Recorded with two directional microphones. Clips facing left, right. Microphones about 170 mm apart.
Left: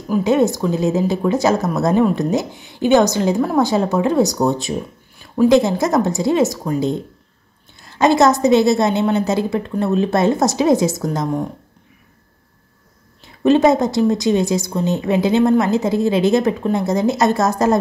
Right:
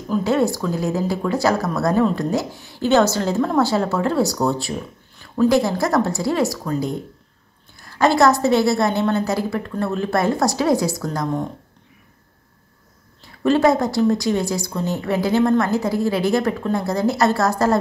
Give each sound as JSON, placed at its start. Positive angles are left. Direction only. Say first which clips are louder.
{"t": 0.1, "sound": "a woman's voice", "louder": "left 3 dB", "side_deg": 20}
{"t": 13.2, "sound": "a woman's voice", "louder": "left 3 dB", "side_deg": 20}